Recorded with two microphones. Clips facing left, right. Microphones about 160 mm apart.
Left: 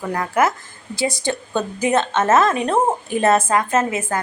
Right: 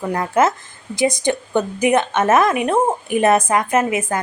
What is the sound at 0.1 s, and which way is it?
A woman's voice, 20° right (ahead or behind).